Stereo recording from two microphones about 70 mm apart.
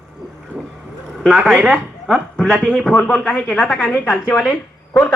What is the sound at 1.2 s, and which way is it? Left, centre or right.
Speech, centre.